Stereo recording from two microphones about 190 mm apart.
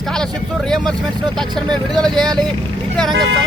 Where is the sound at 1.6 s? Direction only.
20° right (ahead or behind).